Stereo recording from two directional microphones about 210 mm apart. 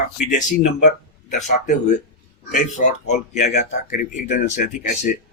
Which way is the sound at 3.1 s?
35° left (ahead or behind).